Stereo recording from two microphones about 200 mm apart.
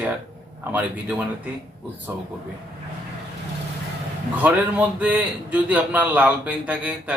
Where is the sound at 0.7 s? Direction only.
10° right (ahead or behind).